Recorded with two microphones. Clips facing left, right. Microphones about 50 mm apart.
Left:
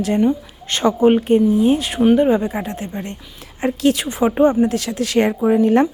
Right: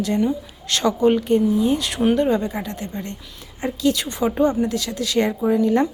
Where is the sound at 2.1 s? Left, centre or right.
Centre.